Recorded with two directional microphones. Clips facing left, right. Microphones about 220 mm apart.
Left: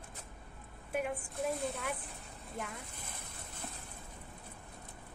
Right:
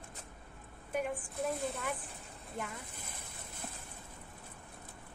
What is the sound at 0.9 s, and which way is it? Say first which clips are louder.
A woman's voice: even; centre (ahead or behind).